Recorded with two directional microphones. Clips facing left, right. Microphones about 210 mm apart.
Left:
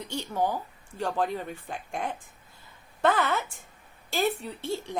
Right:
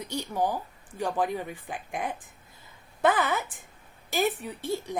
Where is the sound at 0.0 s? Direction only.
15° right (ahead or behind).